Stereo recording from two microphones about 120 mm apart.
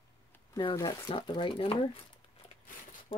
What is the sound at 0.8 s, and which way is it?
Speech, 30° left (ahead or behind).